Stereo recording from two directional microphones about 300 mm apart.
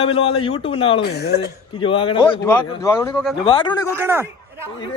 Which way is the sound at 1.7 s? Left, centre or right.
Centre.